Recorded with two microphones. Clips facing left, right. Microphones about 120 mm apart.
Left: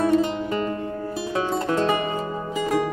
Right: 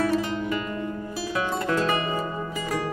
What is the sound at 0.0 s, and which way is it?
Music, 25° left (ahead or behind).